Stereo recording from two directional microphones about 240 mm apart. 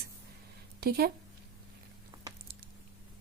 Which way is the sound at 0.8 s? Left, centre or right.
Right.